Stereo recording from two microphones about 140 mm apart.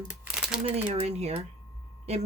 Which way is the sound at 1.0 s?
50° right (ahead or behind).